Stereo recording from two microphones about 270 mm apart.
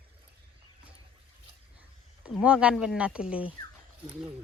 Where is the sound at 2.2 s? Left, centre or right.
Centre.